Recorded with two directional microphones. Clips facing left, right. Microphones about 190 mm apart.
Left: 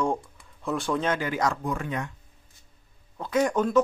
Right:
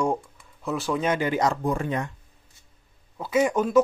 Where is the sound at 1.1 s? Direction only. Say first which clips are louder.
Right 3 dB; 20° right (ahead or behind).